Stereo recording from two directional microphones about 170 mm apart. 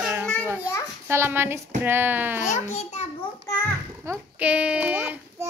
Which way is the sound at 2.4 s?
45° left (ahead or behind).